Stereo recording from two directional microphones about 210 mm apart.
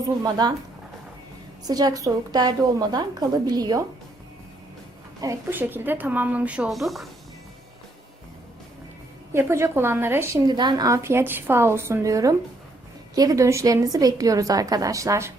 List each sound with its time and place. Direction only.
0.2 s a woman's voice: 20° right (ahead or behind)
1.6 s a woman's voice: 20° right (ahead or behind)
5.2 s a woman's voice: 10° right (ahead or behind)
9.3 s a woman's voice: 10° right (ahead or behind)